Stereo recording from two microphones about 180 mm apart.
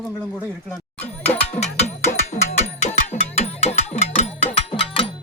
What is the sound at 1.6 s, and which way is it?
Music, 35° left (ahead or behind).